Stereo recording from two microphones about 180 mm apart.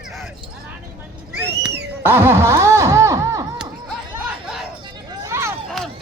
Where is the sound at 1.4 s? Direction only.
70° right (ahead or behind).